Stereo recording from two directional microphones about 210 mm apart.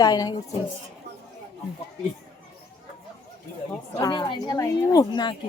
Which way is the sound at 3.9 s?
20° left (ahead or behind).